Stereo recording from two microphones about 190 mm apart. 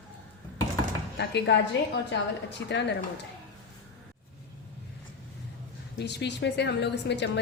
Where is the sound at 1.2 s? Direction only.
65° left (ahead or behind).